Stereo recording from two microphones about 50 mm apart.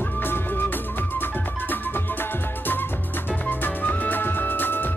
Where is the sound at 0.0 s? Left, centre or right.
Left.